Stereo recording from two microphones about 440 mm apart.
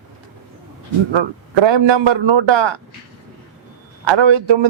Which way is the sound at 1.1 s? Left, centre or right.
Right.